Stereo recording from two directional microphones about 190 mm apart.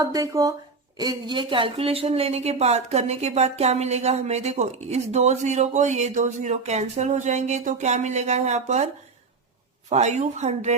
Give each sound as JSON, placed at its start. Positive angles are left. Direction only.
{"t": 0.0, "sound": "speech", "side_deg": -20}
{"t": 9.9, "sound": "speech", "side_deg": -40}